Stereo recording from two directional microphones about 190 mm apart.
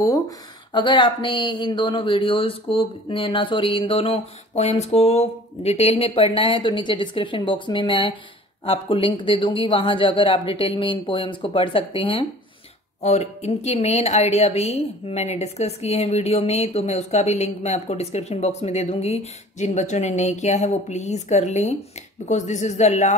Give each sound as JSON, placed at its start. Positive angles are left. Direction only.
{"t": 0.7, "sound": "a woman's voice", "side_deg": 25}